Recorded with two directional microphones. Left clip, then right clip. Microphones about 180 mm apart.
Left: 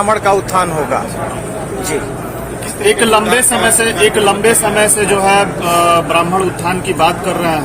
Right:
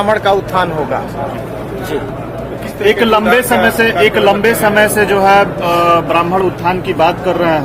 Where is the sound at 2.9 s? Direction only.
40° right (ahead or behind).